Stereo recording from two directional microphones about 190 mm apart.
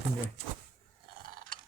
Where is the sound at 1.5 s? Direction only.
45° right (ahead or behind).